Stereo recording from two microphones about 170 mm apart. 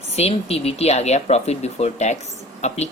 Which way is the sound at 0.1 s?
35° left (ahead or behind).